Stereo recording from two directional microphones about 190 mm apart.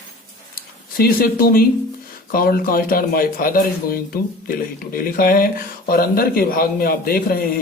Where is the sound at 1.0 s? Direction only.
50° left (ahead or behind).